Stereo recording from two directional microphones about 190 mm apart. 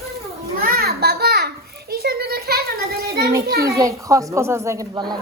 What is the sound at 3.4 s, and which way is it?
Speech, 55° right (ahead or behind).